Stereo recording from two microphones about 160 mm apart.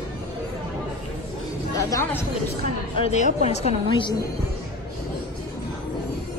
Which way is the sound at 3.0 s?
45° left (ahead or behind).